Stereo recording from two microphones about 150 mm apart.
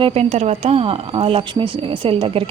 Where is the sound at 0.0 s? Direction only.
45° right (ahead or behind).